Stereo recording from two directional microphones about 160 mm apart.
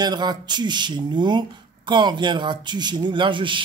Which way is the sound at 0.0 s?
25° right (ahead or behind).